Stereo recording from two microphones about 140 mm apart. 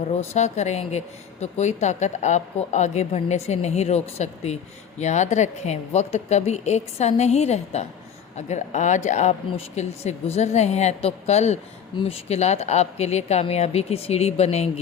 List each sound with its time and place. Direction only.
0.2 s speech: 55° left (ahead or behind)